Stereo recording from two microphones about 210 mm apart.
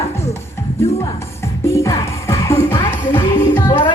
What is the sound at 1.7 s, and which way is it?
Music, 15° left (ahead or behind).